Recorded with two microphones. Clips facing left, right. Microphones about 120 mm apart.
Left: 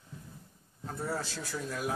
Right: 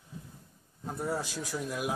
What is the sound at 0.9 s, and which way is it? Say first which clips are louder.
Speech: right 2 dB; 15° right (ahead or behind).